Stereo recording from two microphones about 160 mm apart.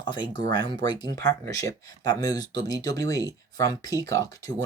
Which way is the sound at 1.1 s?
90° right.